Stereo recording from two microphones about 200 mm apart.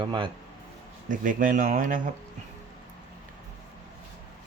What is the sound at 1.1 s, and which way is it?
Speech, 40° right (ahead or behind).